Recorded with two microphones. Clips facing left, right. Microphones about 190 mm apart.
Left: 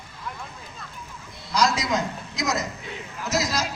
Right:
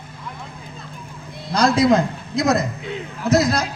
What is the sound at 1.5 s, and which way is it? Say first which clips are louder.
A man's voice: right 8 dB; 55° right (ahead or behind).